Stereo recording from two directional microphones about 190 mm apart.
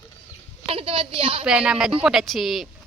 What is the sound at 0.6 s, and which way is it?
Speech, 30° right (ahead or behind).